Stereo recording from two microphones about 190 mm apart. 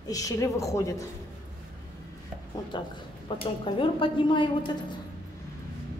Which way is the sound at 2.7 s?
25° left (ahead or behind).